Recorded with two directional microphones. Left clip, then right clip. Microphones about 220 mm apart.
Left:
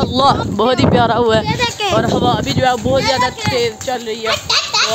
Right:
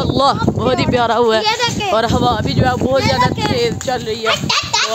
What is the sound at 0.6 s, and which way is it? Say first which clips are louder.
Speech: left 2 dB; 20° left (ahead or behind).